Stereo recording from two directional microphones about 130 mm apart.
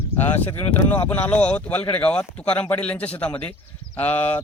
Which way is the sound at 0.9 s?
10° left (ahead or behind).